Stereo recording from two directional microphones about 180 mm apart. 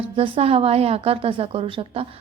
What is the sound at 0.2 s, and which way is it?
A woman's voice, 30° right (ahead or behind).